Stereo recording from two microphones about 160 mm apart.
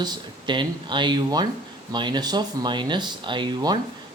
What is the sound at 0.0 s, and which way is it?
Speech, 25° right (ahead or behind).